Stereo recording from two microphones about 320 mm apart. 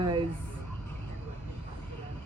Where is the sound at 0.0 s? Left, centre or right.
Centre.